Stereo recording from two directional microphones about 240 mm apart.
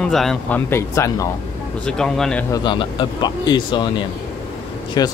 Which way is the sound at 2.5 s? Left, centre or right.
Centre.